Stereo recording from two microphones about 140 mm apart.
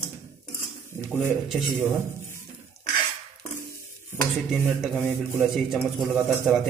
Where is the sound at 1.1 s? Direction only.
5° right (ahead or behind).